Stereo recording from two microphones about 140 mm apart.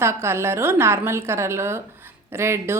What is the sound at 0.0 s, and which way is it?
A woman's voice, 20° right (ahead or behind).